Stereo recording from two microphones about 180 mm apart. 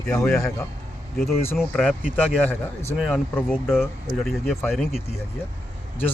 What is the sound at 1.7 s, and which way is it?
Mantra, centre (ahead or behind).